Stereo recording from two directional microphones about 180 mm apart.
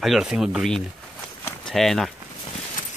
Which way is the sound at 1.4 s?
5° left (ahead or behind).